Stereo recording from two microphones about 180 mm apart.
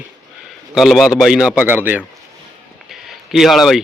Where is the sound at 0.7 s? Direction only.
Centre (ahead or behind).